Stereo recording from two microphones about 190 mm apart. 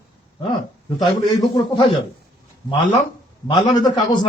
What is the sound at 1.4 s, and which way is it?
Speech, 25° left (ahead or behind).